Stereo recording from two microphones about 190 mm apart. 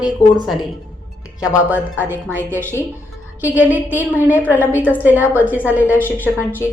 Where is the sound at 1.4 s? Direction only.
10° right (ahead or behind).